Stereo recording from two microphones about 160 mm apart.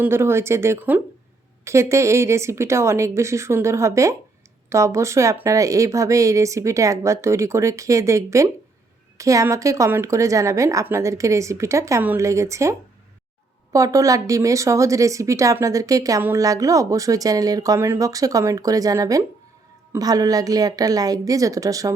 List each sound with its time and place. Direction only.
0.0 s a woman's voice: 15° right (ahead or behind)
13.7 s a woman's voice: 20° right (ahead or behind)